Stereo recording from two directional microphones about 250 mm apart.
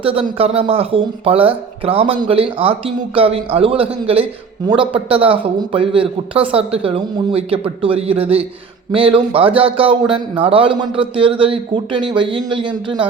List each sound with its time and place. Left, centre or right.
0.0 s speech: right